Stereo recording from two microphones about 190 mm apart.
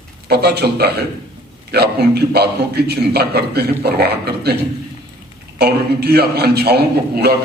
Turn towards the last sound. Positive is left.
turn(degrees=-55)  # may be behind; listen again after turning